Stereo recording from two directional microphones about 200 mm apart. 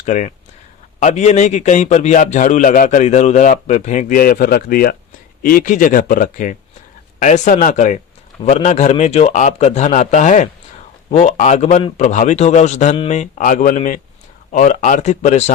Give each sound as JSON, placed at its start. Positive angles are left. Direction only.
{"t": 0.0, "sound": "a man's voice", "side_deg": 35}